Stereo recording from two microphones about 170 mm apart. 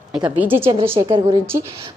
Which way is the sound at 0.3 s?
10° right (ahead or behind).